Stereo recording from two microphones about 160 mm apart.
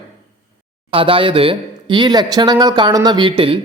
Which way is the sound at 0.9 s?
35° right (ahead or behind).